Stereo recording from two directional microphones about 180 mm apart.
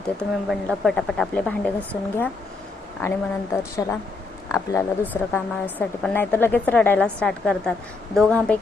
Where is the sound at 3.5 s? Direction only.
15° left (ahead or behind).